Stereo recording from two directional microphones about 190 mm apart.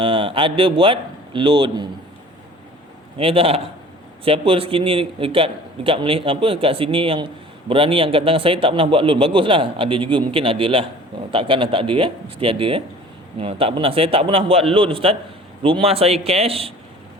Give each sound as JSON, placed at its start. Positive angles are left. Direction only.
{"t": 0.0, "sound": "a man's voice", "side_deg": -25}
{"t": 3.2, "sound": "a man's voice", "side_deg": -30}